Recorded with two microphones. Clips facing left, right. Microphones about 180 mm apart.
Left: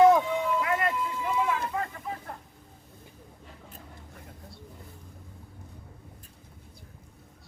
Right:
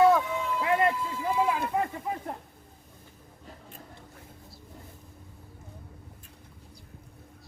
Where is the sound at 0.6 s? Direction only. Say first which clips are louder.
Right 3 dB; 25° right (ahead or behind).